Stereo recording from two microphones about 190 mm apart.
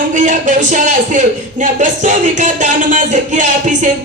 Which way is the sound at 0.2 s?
40° right (ahead or behind).